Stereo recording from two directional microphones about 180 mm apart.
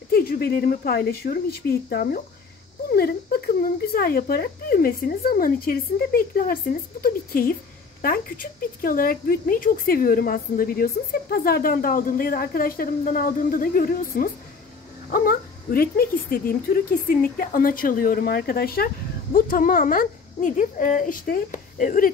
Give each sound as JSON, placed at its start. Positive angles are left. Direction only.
{"t": 0.1, "sound": "speech", "side_deg": 55}